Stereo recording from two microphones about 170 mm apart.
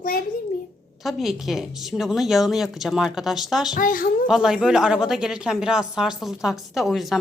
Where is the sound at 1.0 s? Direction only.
Centre (ahead or behind).